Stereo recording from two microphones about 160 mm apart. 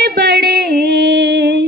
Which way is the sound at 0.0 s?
75° right (ahead or behind).